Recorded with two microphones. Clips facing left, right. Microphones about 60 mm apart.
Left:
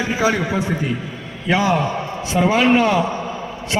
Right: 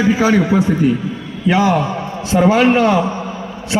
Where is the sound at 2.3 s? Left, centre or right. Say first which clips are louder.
Right 4 dB; right.